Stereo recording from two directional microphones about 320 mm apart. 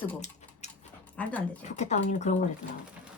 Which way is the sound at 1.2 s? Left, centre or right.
Centre.